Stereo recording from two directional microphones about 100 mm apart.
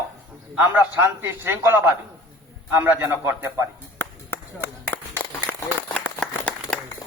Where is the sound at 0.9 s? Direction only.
25° right (ahead or behind).